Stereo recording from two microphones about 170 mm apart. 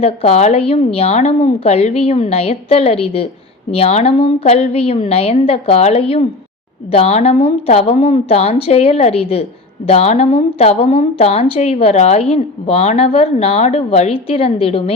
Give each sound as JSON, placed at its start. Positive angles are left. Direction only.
{"t": 0.0, "sound": "a woman's voice", "side_deg": 35}